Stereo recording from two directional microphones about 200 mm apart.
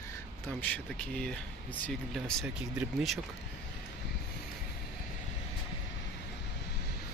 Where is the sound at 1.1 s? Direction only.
5° left (ahead or behind).